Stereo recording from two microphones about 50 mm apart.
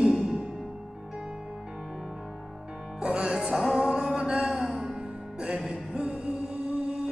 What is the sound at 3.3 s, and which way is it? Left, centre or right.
Music, centre.